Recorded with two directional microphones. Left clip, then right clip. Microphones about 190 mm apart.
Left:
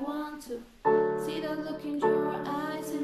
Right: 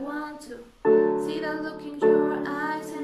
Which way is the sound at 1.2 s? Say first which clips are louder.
Right 4 dB; 15° left (ahead or behind).